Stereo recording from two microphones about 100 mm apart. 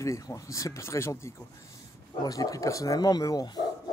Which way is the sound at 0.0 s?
30° left (ahead or behind).